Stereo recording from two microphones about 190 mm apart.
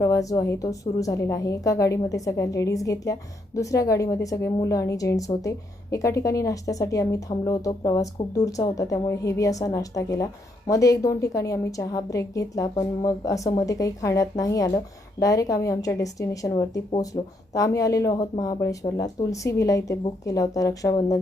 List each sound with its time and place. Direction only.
0.0 s a woman's voice: 15° left (ahead or behind)